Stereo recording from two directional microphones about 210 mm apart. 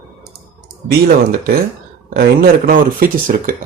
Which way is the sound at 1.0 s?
45° right (ahead or behind).